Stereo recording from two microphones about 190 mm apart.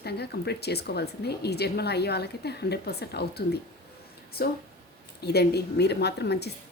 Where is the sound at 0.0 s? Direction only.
60° left (ahead or behind).